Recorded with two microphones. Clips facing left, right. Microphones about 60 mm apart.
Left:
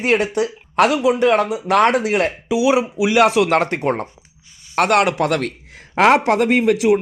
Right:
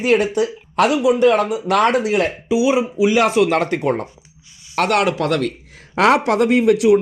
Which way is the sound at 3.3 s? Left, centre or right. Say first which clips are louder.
Right 1 dB; left.